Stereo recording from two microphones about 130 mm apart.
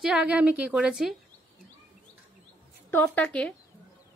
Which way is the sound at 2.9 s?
15° left (ahead or behind).